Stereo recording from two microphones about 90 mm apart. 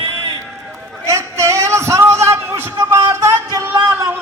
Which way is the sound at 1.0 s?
35° right (ahead or behind).